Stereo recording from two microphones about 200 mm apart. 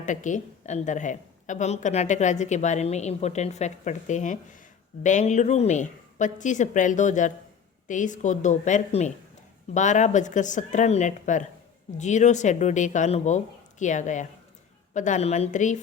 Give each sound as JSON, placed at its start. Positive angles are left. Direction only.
{"t": 0.0, "sound": "a woman's voice", "side_deg": 40}